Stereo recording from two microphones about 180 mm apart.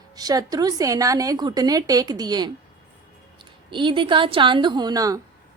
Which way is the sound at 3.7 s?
25° right (ahead or behind).